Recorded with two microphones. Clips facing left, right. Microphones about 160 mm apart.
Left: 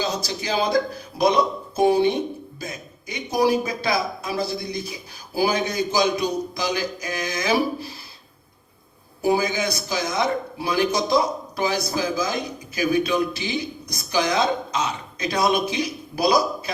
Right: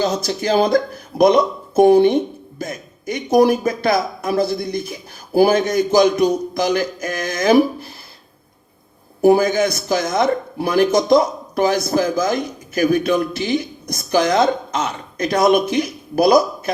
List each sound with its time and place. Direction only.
0.0 s a man's voice: 55° right (ahead or behind)
9.2 s a man's voice: 55° right (ahead or behind)